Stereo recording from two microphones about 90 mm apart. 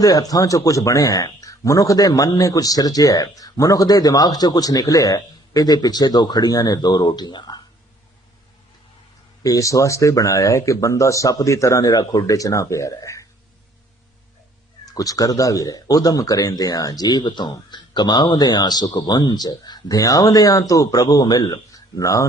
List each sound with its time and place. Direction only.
0.0 s speech: 40° left (ahead or behind)
9.4 s speech: 40° left (ahead or behind)
14.8 s speech: 40° left (ahead or behind)